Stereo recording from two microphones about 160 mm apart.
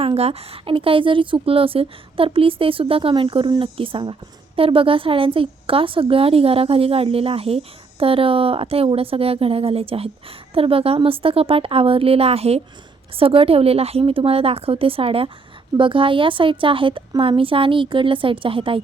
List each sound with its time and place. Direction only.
0.0 s a woman's voice: 40° right (ahead or behind)